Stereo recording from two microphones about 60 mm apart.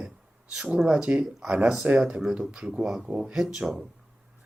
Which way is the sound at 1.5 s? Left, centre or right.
Centre.